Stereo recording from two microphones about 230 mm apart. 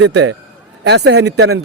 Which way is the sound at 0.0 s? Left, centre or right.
Right.